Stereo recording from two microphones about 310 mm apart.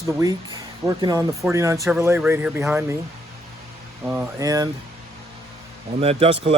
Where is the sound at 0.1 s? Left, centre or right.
Centre.